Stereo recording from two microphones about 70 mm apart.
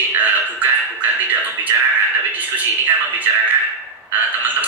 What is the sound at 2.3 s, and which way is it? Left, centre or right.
Speech, right.